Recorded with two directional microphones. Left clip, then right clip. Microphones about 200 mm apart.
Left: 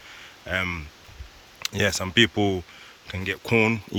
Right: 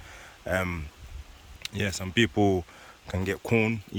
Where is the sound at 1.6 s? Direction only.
10° right (ahead or behind).